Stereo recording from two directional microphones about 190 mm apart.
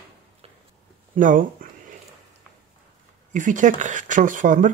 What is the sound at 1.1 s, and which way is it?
Speech, 45° right (ahead or behind).